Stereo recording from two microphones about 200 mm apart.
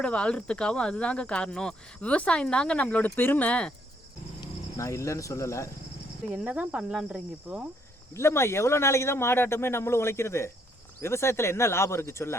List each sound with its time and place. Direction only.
0.0 s speech: 5° left (ahead or behind)
4.8 s a man's voice: 15° left (ahead or behind)
6.3 s speech: 5° right (ahead or behind)
8.1 s a man's voice: 15° left (ahead or behind)